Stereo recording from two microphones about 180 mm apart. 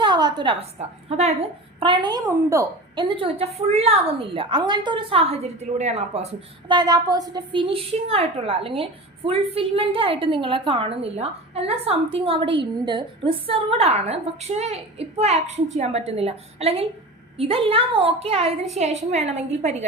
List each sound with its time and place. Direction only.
0.0 s a woman's voice: 25° right (ahead or behind); by 6.2 s 40° right (ahead or behind)
6.7 s a woman's voice: 25° right (ahead or behind); by 19.7 s 40° right (ahead or behind)